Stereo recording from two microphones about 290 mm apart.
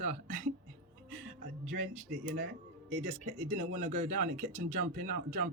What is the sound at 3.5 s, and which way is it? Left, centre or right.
A man's voice, right.